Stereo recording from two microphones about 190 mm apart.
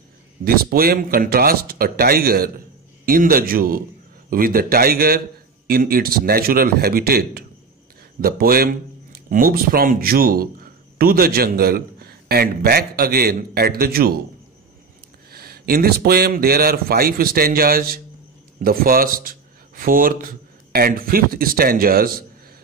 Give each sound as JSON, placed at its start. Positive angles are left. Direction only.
{"t": 0.5, "sound": "speech", "side_deg": -50}
{"t": 15.3, "sound": "speech", "side_deg": -55}